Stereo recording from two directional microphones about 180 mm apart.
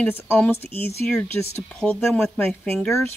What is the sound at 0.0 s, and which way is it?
Speech, 10° left (ahead or behind).